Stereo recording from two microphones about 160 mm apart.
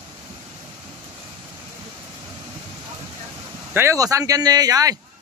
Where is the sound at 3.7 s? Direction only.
20° right (ahead or behind).